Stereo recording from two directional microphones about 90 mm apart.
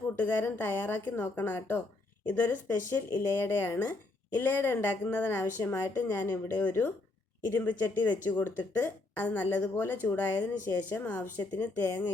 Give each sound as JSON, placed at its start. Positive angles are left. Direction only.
{"t": 0.2, "sound": "speech", "side_deg": 20}